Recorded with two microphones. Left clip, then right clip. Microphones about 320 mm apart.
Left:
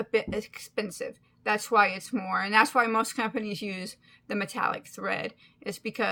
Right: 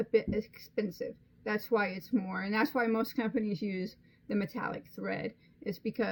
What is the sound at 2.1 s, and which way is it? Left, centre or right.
Speech, left.